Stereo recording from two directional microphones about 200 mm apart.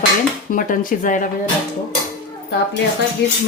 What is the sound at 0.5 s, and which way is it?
Speech, 45° left (ahead or behind).